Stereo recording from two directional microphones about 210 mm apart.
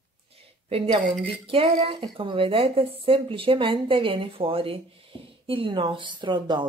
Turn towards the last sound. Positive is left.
turn(degrees=-20)  # may be behind; listen again after turning